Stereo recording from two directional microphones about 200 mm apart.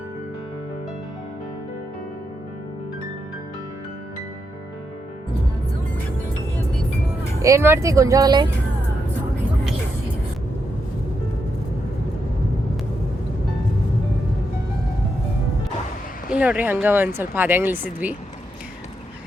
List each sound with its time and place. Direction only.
7.4 s speech: 15° right (ahead or behind)
16.3 s speech: 5° right (ahead or behind)